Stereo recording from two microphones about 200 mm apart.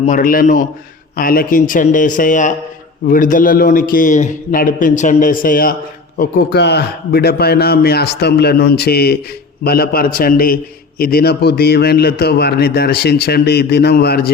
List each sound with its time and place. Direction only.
0.0 s a man's voice: 40° left (ahead or behind)
6.1 s a man's voice: 55° left (ahead or behind)